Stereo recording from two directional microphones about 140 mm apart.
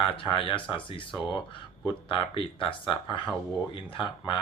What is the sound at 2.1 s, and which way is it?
Speech, 35° left (ahead or behind).